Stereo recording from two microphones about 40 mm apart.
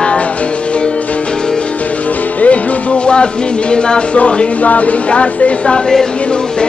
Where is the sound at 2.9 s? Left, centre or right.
Left.